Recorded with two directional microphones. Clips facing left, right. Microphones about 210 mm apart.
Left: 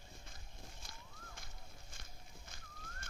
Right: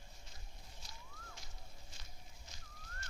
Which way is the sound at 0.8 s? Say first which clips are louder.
Left 1 dB; 55° left (ahead or behind).